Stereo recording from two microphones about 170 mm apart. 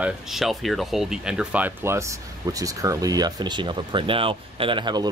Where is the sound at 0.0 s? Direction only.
Centre (ahead or behind).